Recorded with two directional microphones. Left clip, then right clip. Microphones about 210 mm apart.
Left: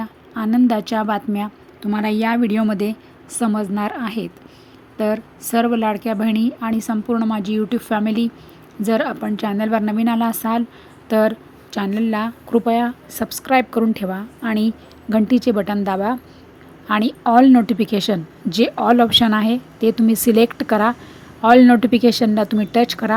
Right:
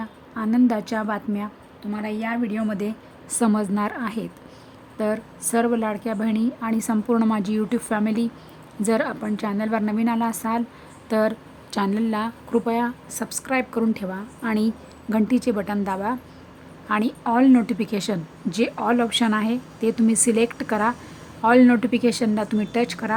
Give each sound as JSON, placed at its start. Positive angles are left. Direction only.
{"t": 0.0, "sound": "a woman's voice", "side_deg": 5}
{"t": 1.8, "sound": "a woman's voice", "side_deg": 25}
{"t": 3.3, "sound": "a woman's voice", "side_deg": 0}